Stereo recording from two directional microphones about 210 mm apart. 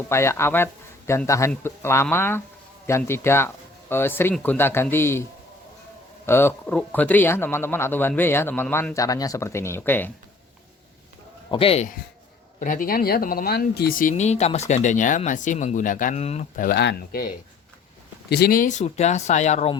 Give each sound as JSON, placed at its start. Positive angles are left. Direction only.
{"t": 0.1, "sound": "speech", "side_deg": 10}
{"t": 6.2, "sound": "speech", "side_deg": 10}
{"t": 11.5, "sound": "speech", "side_deg": 25}
{"t": 12.5, "sound": "speech", "side_deg": 40}
{"t": 18.3, "sound": "speech", "side_deg": 50}